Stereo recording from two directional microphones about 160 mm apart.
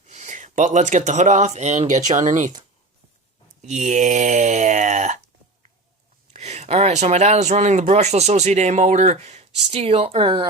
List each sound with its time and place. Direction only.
0.0 s speech: 50° right (ahead or behind)
3.6 s speech: 45° right (ahead or behind)
6.3 s speech: 45° right (ahead or behind)